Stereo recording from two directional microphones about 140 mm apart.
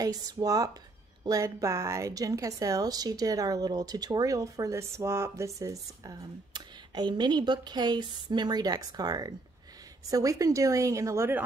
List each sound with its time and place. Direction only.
0.0 s a woman's voice: 25° right (ahead or behind)